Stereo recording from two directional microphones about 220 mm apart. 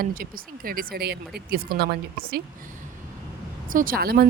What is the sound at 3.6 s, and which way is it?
Speech, 40° right (ahead or behind).